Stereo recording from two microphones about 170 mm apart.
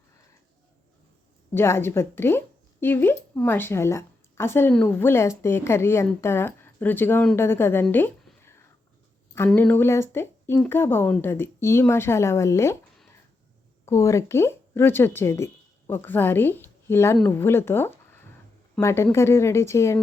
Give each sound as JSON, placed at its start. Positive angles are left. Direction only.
{"t": 1.5, "sound": "speech", "side_deg": 15}
{"t": 9.5, "sound": "speech", "side_deg": 10}
{"t": 13.8, "sound": "speech", "side_deg": 15}